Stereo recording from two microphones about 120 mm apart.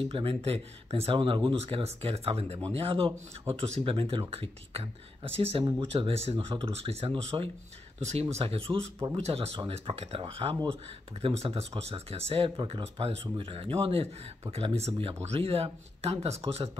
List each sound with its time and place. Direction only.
0.1 s speech: 55° right (ahead or behind)
11.1 s speech: 55° right (ahead or behind)